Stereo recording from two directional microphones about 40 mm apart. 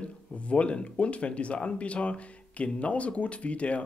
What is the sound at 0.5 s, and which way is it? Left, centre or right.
Speech, left.